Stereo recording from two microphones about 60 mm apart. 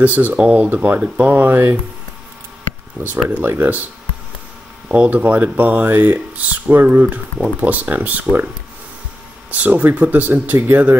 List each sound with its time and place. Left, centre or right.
0.0 s speech: right
3.0 s speech: right
4.8 s speech: right
9.5 s speech: right